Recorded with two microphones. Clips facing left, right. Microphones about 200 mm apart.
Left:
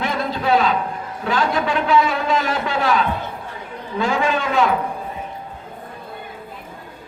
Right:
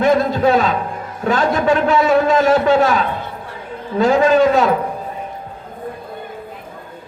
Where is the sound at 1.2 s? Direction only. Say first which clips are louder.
Right 4 dB; 45° right (ahead or behind).